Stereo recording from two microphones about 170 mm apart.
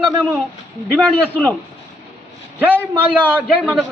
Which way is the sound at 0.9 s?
5° left (ahead or behind).